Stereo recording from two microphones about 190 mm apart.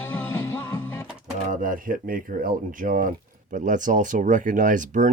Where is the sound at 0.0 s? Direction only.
10° left (ahead or behind).